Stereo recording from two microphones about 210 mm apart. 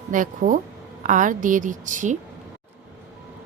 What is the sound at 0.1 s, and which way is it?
A woman's voice, 40° right (ahead or behind).